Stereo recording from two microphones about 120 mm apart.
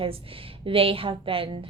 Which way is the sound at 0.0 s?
50° right (ahead or behind).